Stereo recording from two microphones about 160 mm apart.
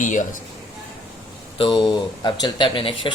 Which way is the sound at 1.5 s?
30° left (ahead or behind).